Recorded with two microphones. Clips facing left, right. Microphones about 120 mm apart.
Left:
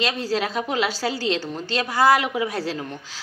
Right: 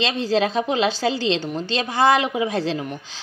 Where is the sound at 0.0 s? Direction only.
25° right (ahead or behind).